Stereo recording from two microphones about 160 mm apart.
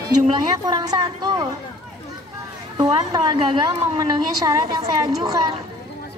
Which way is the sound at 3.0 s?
25° right (ahead or behind).